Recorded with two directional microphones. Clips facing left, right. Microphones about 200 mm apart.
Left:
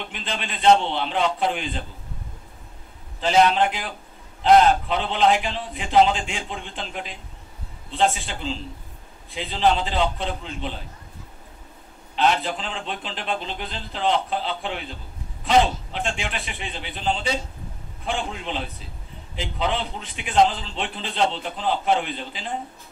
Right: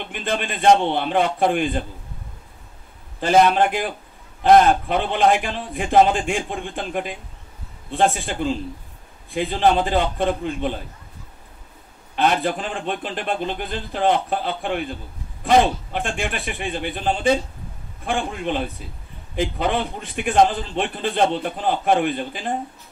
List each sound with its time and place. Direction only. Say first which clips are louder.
0.1 s a man's voice: right 6 dB; 55° right (ahead or behind)
3.2 s a man's voice: right 3 dB; 55° right (ahead or behind)
12.2 s a man's voice: right 2 dB; 50° right (ahead or behind)